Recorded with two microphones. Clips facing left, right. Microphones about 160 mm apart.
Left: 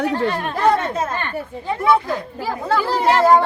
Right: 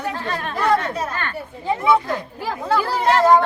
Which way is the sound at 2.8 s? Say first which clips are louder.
Left 1 dB; 10° left (ahead or behind).